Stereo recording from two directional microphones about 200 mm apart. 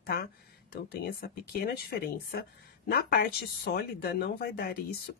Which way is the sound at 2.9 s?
50° left (ahead or behind).